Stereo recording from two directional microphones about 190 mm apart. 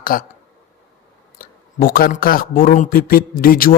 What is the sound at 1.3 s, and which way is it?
Speech, 50° left (ahead or behind).